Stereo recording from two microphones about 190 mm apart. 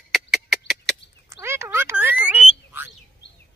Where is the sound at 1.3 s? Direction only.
15° right (ahead or behind).